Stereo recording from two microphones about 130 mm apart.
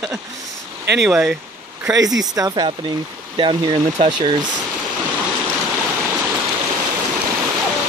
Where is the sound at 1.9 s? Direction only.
30° right (ahead or behind).